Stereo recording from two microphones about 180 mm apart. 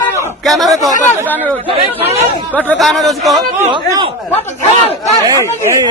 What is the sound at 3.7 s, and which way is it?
Speech, 25° right (ahead or behind).